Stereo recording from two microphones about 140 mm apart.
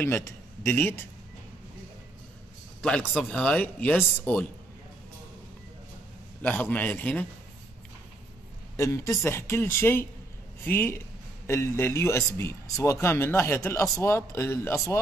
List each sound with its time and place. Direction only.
0.0 s a man's voice: 15° left (ahead or behind)
2.8 s speech: 10° left (ahead or behind)
6.4 s speech: 10° left (ahead or behind)
8.7 s speech: 20° left (ahead or behind)